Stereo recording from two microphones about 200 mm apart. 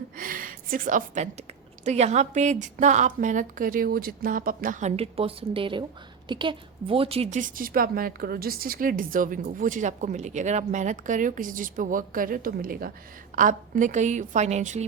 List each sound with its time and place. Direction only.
0.2 s a woman's voice: 45° right (ahead or behind)